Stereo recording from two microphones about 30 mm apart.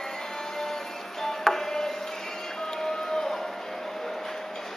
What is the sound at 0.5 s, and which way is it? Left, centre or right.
Music, centre.